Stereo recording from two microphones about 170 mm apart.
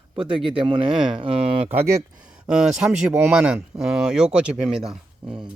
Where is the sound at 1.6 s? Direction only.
15° right (ahead or behind).